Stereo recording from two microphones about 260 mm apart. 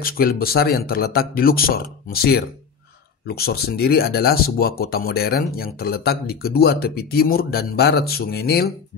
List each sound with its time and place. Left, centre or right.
0.0 s speech: left